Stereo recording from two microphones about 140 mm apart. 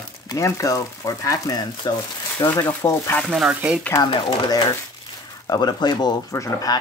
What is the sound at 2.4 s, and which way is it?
Speech, 15° left (ahead or behind).